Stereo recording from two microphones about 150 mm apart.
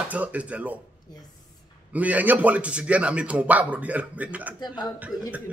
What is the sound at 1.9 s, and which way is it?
A man's voice, 10° right (ahead or behind).